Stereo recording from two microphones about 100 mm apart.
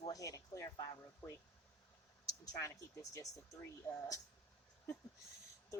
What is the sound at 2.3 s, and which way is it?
Speech, 40° left (ahead or behind).